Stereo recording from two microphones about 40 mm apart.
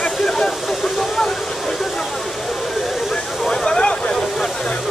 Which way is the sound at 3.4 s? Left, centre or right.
Centre.